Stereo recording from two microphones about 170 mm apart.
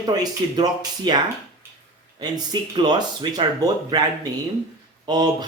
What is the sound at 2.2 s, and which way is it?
Speech, 25° right (ahead or behind).